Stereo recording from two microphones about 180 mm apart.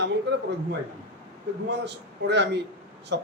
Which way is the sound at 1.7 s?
70° right (ahead or behind).